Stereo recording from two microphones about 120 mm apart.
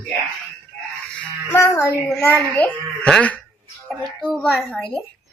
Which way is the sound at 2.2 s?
15° left (ahead or behind).